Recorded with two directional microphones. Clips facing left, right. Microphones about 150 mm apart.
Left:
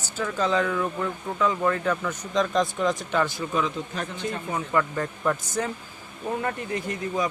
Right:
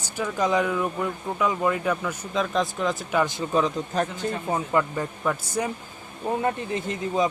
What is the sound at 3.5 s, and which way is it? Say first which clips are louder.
Speech: right 4 dB; 35° right (ahead or behind).